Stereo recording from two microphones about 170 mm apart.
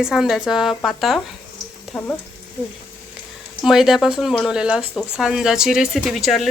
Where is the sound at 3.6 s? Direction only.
Centre (ahead or behind).